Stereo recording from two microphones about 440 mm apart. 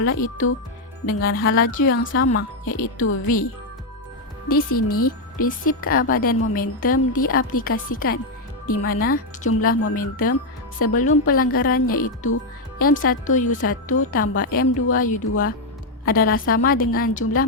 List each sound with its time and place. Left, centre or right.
0.2 s a woman's voice: centre
2.7 s a woman's voice: centre
4.9 s a woman's voice: centre
9.9 s a woman's voice: centre
15.3 s a woman's voice: left